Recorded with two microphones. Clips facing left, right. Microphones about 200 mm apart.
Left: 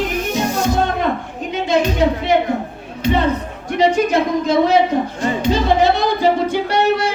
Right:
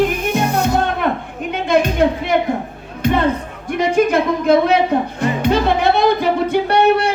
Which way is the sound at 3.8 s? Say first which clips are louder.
Even; 55° right (ahead or behind).